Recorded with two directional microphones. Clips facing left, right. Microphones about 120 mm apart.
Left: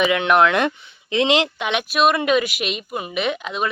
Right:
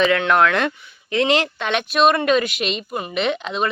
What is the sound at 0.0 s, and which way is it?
Speech, 15° left (ahead or behind).